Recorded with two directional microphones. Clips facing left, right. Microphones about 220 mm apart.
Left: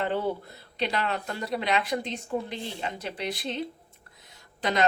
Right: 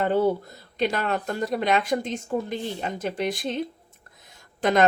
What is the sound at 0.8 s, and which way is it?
Speech, 45° right (ahead or behind).